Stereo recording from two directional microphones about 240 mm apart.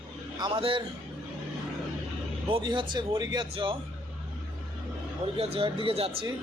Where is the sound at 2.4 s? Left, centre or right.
Right.